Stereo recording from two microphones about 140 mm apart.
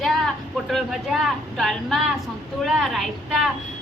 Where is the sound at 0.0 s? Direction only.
Centre (ahead or behind).